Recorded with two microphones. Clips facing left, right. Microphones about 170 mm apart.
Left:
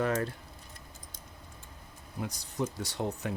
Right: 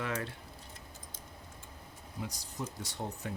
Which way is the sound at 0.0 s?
40° left (ahead or behind).